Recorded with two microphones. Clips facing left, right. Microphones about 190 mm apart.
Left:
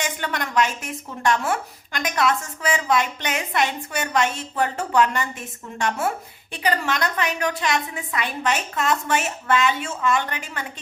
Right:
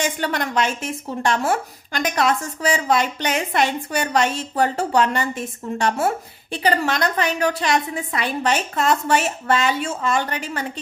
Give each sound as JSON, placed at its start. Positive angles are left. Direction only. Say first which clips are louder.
{"t": 0.0, "sound": "speech", "louder": "right 4 dB", "side_deg": -35}